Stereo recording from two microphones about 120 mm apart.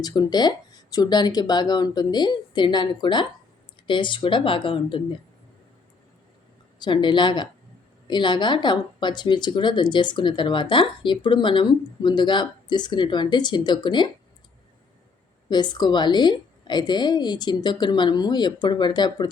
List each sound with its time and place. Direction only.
0.0 s speech: 35° left (ahead or behind)
6.7 s speech: 40° left (ahead or behind)
15.4 s speech: 35° left (ahead or behind)